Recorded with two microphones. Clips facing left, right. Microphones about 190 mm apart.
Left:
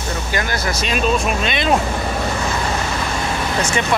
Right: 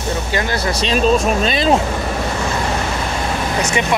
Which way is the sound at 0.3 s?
25° right (ahead or behind).